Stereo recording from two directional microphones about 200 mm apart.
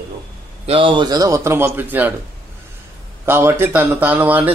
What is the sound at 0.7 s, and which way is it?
A man's voice, 25° right (ahead or behind).